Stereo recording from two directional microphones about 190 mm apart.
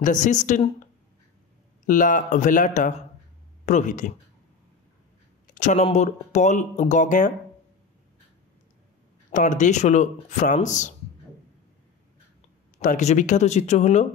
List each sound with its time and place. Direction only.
0.0 s speech: 40° left (ahead or behind)
1.9 s speech: 45° left (ahead or behind)
5.5 s speech: 40° left (ahead or behind)
9.3 s speech: 40° left (ahead or behind)
12.7 s speech: 40° left (ahead or behind)